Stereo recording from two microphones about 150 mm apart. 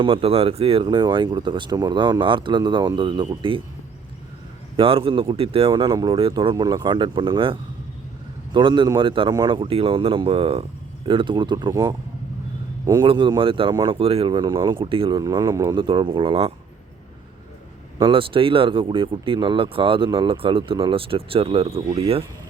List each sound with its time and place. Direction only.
0.0 s speech: 40° right (ahead or behind)
4.8 s speech: 35° right (ahead or behind)
15.2 s speech: 25° right (ahead or behind)
15.7 s speech: 30° right (ahead or behind)
18.0 s speech: 35° right (ahead or behind)